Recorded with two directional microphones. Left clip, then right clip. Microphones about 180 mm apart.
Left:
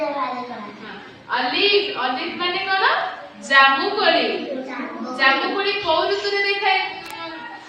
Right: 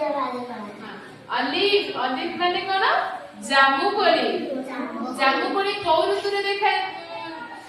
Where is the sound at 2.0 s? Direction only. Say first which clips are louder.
Left 2 dB; 20° right (ahead or behind).